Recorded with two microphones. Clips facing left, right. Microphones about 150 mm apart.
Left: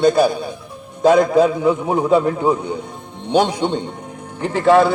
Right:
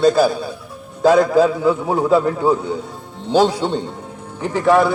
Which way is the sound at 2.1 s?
20° left (ahead or behind).